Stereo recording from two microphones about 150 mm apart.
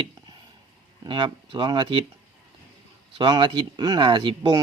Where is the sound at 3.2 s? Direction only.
30° right (ahead or behind).